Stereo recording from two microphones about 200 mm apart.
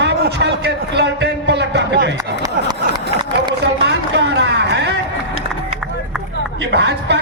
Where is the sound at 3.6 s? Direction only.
60° right (ahead or behind).